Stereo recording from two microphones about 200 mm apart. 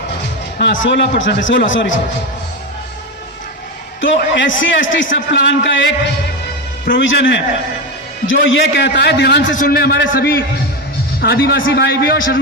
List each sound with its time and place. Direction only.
0.6 s a man's voice: 70° left (ahead or behind)
4.2 s a man's voice: 70° left (ahead or behind)
6.9 s a man's voice: 70° left (ahead or behind)
9.6 s a man's voice: 50° left (ahead or behind)